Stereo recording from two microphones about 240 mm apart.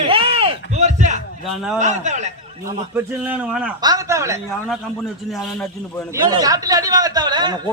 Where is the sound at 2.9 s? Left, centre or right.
Centre.